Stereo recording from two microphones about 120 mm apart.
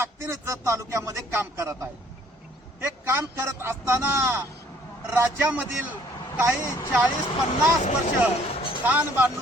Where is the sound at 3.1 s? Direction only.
20° right (ahead or behind).